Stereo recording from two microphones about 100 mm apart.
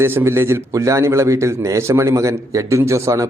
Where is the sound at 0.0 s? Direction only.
25° right (ahead or behind).